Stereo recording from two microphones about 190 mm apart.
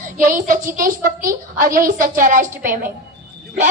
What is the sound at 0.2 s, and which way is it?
A woman's voice, 45° right (ahead or behind).